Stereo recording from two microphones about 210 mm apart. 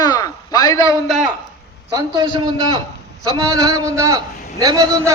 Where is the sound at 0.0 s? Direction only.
20° left (ahead or behind).